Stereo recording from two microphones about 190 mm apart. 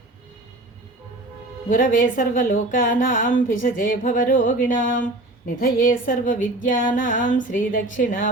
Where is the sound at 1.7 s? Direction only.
45° left (ahead or behind).